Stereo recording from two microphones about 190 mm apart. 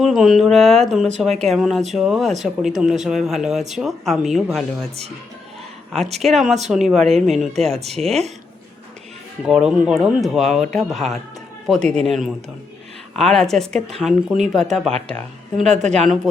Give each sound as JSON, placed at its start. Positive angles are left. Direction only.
{"t": 0.0, "sound": "speech", "side_deg": 0}
{"t": 6.2, "sound": "speech", "side_deg": 0}
{"t": 9.5, "sound": "speech", "side_deg": -5}